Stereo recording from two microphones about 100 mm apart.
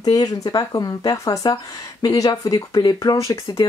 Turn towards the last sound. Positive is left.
turn(degrees=30)  # may be behind; listen again after turning